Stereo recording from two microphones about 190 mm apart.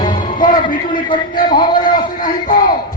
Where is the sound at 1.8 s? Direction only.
45° left (ahead or behind).